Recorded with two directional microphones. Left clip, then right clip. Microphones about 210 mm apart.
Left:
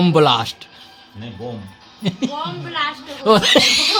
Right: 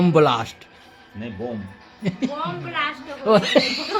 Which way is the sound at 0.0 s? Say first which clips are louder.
Left 3 dB; 10° left (ahead or behind).